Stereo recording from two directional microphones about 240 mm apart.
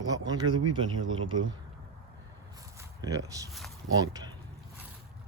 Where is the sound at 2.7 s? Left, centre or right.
Centre.